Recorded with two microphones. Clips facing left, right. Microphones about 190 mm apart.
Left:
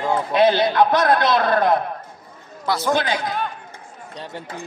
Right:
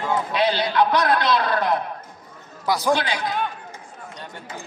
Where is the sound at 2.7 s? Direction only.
15° right (ahead or behind).